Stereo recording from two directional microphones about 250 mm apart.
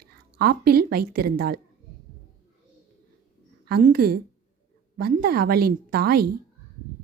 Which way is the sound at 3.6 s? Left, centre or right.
Right.